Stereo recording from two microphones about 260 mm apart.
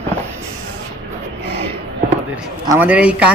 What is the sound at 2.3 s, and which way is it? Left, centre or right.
Speech, centre.